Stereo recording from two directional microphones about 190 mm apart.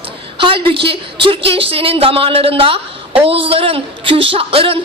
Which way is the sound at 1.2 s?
30° right (ahead or behind).